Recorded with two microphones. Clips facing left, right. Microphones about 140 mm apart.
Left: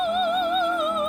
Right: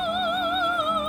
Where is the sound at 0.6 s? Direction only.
35° left (ahead or behind).